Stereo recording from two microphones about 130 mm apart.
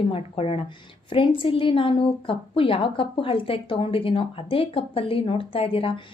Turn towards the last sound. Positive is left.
turn(degrees=45)  # may be behind; listen again after turning